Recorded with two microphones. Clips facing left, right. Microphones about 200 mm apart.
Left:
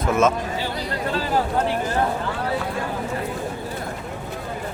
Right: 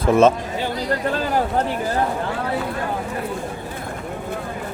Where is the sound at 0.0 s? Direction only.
30° right (ahead or behind).